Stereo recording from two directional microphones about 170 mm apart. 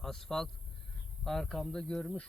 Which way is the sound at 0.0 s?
5° left (ahead or behind).